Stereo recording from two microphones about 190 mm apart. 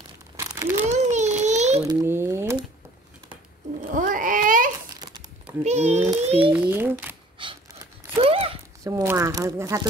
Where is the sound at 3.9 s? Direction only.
45° right (ahead or behind).